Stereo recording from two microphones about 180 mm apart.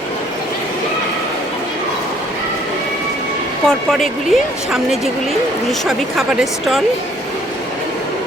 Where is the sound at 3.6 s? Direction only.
Centre (ahead or behind).